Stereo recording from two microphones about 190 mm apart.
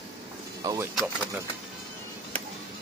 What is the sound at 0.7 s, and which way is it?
Speech, 15° right (ahead or behind).